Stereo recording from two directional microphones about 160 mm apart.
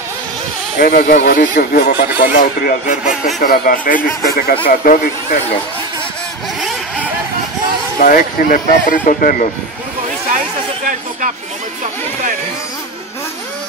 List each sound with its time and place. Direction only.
0.7 s speech: 65° left (ahead or behind)
8.0 s speech: 60° left (ahead or behind)